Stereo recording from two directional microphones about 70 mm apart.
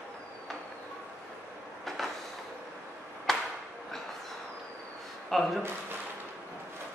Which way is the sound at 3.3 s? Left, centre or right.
Centre.